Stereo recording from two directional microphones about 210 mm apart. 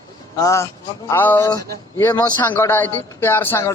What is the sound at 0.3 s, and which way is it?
A man's voice, 15° left (ahead or behind).